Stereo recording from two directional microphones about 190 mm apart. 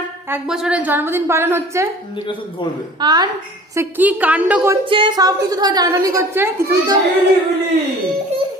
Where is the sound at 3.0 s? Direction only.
20° right (ahead or behind).